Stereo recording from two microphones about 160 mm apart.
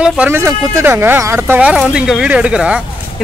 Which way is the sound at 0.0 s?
10° right (ahead or behind).